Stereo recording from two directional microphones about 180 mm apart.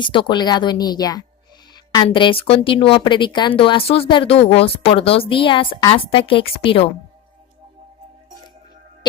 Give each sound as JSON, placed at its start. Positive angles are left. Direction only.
{"t": 0.0, "sound": "speech", "side_deg": 25}
{"t": 1.7, "sound": "a sound", "side_deg": 20}
{"t": 2.0, "sound": "speech", "side_deg": 30}